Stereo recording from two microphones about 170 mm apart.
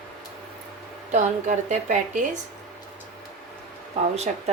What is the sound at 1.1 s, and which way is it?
A woman's voice, 45° right (ahead or behind).